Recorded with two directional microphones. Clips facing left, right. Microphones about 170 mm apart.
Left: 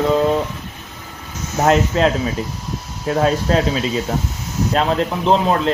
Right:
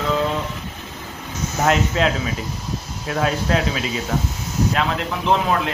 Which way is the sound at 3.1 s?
35° left (ahead or behind).